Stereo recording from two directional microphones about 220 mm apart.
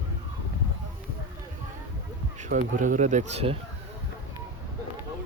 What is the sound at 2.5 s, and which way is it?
Speech, 40° right (ahead or behind).